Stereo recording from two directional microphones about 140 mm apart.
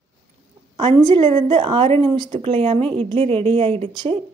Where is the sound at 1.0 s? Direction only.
40° right (ahead or behind).